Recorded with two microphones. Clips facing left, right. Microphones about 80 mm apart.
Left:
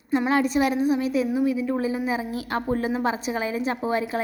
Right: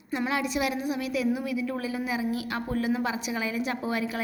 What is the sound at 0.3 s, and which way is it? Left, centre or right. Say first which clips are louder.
A woman's voice: left 6 dB; left.